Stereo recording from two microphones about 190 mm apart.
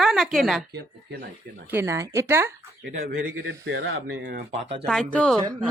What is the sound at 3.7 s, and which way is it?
Speech, 60° right (ahead or behind).